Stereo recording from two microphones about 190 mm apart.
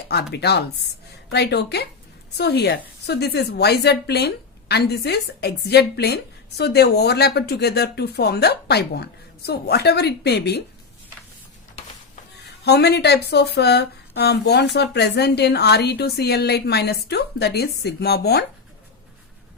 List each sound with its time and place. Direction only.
0.3 s speech: 60° left (ahead or behind)
12.6 s speech: 60° left (ahead or behind)